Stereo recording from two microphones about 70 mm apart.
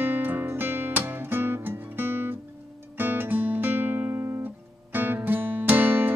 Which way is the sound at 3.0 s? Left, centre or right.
Right.